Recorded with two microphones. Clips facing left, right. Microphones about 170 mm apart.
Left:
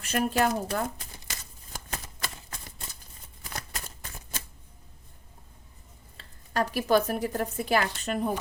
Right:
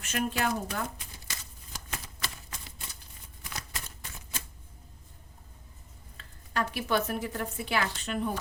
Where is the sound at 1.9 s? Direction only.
45° left (ahead or behind).